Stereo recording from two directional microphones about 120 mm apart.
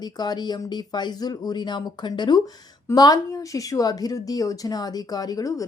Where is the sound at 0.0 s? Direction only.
35° left (ahead or behind).